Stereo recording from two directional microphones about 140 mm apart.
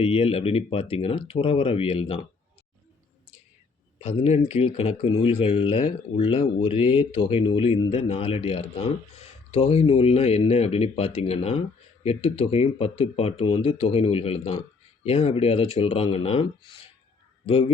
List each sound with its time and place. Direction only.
0.0 s speech: 45° left (ahead or behind)
3.9 s speech: 50° left (ahead or behind)